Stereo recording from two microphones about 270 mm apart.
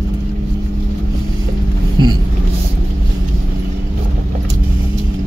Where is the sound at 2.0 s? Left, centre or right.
Centre.